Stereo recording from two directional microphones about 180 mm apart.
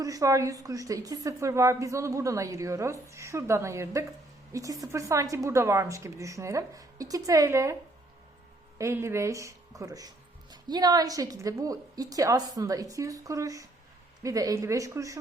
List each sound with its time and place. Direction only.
0.0 s a woman's voice: 20° right (ahead or behind)
8.8 s a woman's voice: 15° right (ahead or behind)